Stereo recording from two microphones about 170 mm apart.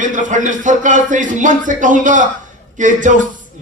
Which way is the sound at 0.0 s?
50° right (ahead or behind).